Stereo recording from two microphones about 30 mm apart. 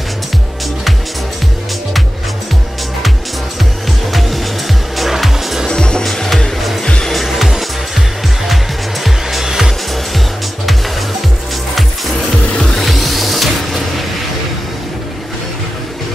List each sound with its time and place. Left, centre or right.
4.1 s music: centre
5.7 s music: left
6.1 s music: centre
7.2 s music: centre
9.4 s music: centre
12.7 s music: centre